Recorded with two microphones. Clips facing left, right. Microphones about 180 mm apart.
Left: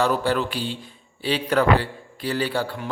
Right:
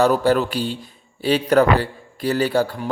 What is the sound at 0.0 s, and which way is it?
A man's voice, 45° right (ahead or behind).